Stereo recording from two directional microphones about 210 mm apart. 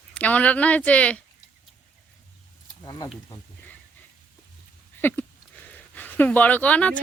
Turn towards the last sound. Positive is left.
turn(degrees=5)  # may be behind; listen again after turning